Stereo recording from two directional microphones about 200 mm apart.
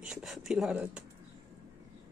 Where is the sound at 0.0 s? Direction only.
Centre (ahead or behind).